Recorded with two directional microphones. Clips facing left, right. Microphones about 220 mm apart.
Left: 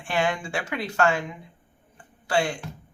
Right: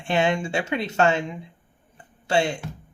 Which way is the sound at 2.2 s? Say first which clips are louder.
Right 2 dB; 25° right (ahead or behind).